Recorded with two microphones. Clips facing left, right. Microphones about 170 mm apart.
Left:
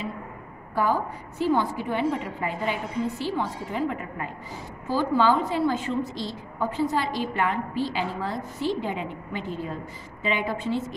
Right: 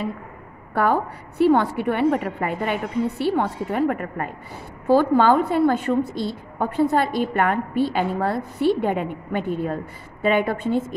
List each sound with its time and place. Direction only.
0.7 s a woman's voice: 65° right (ahead or behind)